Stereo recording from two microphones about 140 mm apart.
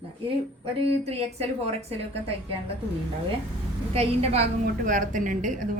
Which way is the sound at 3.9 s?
45° right (ahead or behind).